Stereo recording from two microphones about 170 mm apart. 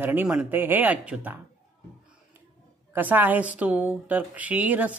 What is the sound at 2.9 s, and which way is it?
Speech, 10° right (ahead or behind).